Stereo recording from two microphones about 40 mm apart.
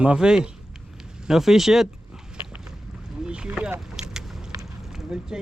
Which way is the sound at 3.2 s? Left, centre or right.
Right.